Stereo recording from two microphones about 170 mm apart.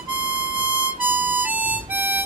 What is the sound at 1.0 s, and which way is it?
Harmonica, 10° right (ahead or behind).